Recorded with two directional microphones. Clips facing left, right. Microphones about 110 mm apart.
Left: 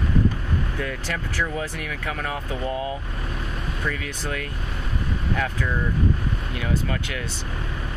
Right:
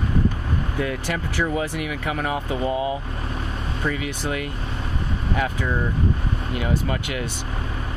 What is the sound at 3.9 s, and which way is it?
Speech, 10° right (ahead or behind).